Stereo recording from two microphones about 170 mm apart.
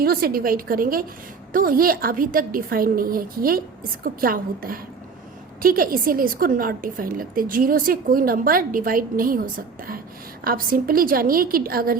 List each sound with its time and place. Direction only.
0.0 s a woman's voice: 60° right (ahead or behind)